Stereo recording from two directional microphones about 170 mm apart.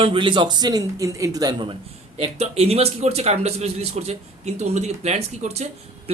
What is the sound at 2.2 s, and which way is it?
A man's voice, 40° right (ahead or behind).